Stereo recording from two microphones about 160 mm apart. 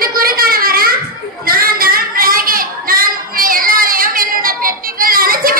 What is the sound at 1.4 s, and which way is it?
Child singing, 65° right (ahead or behind).